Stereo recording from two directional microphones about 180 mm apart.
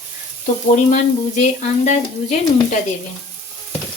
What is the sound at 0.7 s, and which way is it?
Speech, 45° left (ahead or behind).